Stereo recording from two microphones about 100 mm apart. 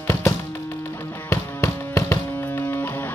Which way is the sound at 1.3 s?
30° left (ahead or behind).